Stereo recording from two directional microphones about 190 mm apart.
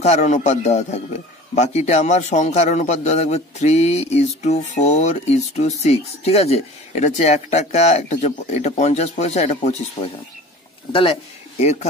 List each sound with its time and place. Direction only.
0.0 s a man's voice: 35° left (ahead or behind)
10.9 s speech: 30° left (ahead or behind)